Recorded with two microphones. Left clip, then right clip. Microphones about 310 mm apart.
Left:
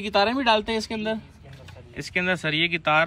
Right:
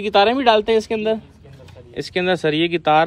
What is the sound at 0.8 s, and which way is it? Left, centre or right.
Speech, left.